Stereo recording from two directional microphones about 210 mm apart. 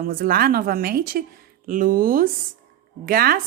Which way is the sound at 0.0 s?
45° right (ahead or behind).